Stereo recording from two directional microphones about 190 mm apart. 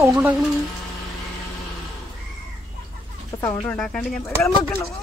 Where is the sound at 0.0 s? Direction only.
10° right (ahead or behind).